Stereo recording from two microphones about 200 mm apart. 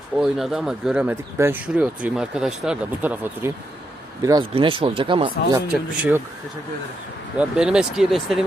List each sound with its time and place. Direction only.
0.2 s speech: centre (ahead or behind); by 5.5 s 25° right (ahead or behind)
5.5 s speech: 5° right (ahead or behind)
7.3 s speech: 5° right (ahead or behind)